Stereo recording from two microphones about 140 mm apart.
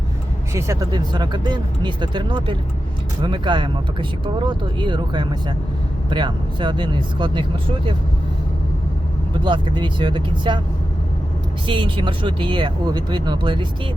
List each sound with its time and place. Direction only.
0.5 s speech: 20° right (ahead or behind)
0.9 s speech: 30° right (ahead or behind)
9.4 s speech: 35° right (ahead or behind)
11.6 s speech: 35° right (ahead or behind)